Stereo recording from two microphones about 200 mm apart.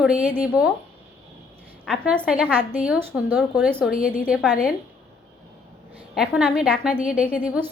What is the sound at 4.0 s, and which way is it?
Speech, 45° left (ahead or behind).